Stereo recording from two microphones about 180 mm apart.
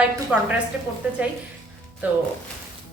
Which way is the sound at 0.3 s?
5° right (ahead or behind).